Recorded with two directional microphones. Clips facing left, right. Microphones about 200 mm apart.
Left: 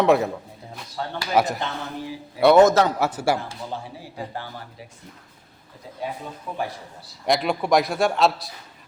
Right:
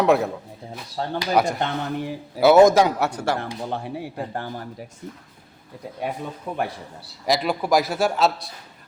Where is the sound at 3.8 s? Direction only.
60° right (ahead or behind).